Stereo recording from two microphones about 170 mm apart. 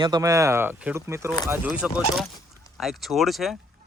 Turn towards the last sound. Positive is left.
turn(degrees=0)  # may be behind; listen again after turning